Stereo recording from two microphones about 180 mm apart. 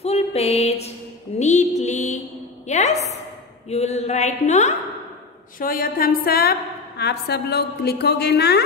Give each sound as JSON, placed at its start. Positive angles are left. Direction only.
{"t": 0.0, "sound": "music", "side_deg": 35}
{"t": 2.7, "sound": "a sound", "side_deg": 40}
{"t": 3.6, "sound": "speech", "side_deg": 35}
{"t": 5.6, "sound": "a woman's voice", "side_deg": 50}